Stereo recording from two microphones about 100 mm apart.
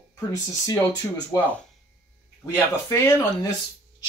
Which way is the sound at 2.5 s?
25° left (ahead or behind).